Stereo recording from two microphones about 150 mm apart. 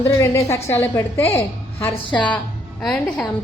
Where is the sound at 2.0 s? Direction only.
30° left (ahead or behind).